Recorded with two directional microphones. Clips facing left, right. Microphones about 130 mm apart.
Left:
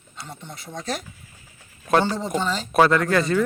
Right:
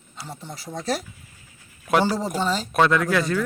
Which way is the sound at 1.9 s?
5° right (ahead or behind).